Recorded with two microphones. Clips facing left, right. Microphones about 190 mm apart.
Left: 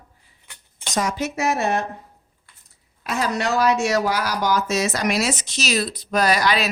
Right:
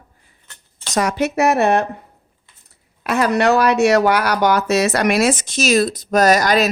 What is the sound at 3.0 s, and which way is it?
Speech, 65° right (ahead or behind).